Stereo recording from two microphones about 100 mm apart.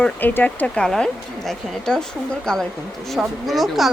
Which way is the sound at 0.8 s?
5° left (ahead or behind).